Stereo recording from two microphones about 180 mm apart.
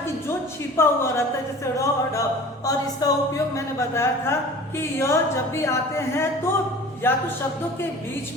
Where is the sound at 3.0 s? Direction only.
20° left (ahead or behind).